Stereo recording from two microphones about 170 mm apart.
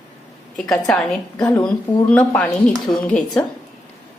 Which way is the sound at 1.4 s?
20° left (ahead or behind).